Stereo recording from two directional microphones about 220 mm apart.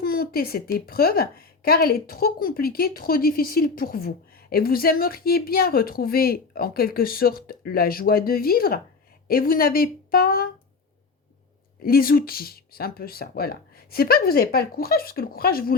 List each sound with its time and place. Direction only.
0.0 s a woman's voice: 45° left (ahead or behind)
11.8 s a woman's voice: 40° left (ahead or behind)